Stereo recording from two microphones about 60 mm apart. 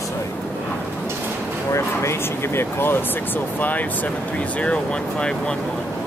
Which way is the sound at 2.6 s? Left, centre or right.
Left.